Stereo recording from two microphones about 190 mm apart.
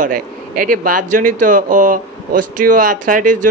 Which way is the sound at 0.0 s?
45° right (ahead or behind).